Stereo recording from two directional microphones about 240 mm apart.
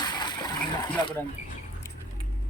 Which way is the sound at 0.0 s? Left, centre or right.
Centre.